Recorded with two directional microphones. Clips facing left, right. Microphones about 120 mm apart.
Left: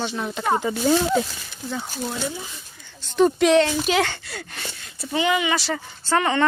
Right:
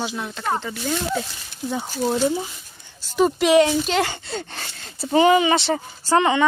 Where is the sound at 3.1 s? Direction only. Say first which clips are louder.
Left 1 dB; 5° right (ahead or behind).